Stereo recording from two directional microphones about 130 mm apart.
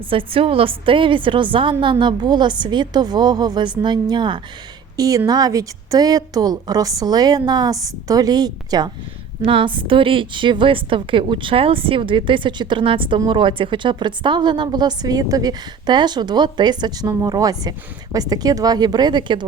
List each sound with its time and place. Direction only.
0.1 s a woman's voice: 45° right (ahead or behind)
9.4 s a woman's voice: 45° right (ahead or behind)